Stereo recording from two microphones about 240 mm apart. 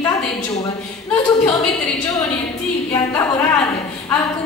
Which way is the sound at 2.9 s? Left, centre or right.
Centre.